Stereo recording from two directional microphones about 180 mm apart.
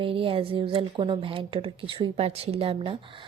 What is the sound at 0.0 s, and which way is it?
Speech, 30° right (ahead or behind).